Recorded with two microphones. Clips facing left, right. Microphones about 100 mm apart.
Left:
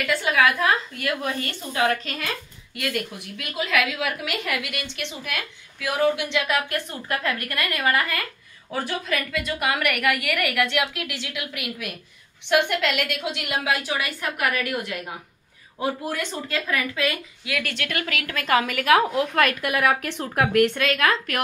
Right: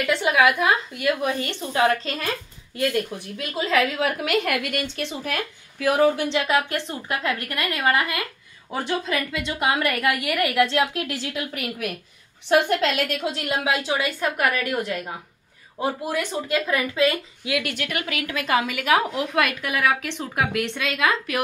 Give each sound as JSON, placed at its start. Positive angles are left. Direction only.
{"t": 0.0, "sound": "a woman's voice", "side_deg": -20}
{"t": 13.7, "sound": "a woman's voice", "side_deg": -25}
{"t": 16.1, "sound": "a woman's voice", "side_deg": -15}
{"t": 19.7, "sound": "a woman's voice", "side_deg": 5}